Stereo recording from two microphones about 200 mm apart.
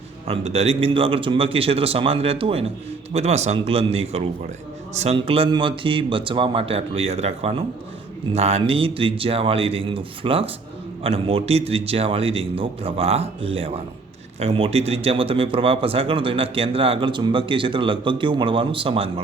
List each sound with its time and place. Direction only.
0.3 s a man's voice: 30° right (ahead or behind)